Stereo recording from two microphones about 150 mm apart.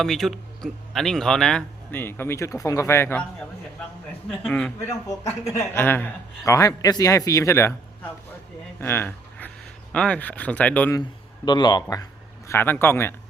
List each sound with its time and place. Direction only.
0.0 s speech: centre (ahead or behind)
4.3 s speech: 5° left (ahead or behind)
4.9 s a man's voice: 20° left (ahead or behind)
8.8 s a sound: 15° left (ahead or behind)
9.9 s speech: 5° left (ahead or behind)
11.4 s a man's voice: 30° left (ahead or behind)
12.5 s speech: 15° left (ahead or behind)